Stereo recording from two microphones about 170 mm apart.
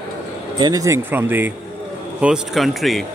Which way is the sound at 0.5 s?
25° right (ahead or behind).